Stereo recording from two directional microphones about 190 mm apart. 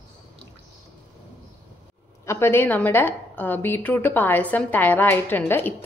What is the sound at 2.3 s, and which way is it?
A woman's voice, 10° left (ahead or behind).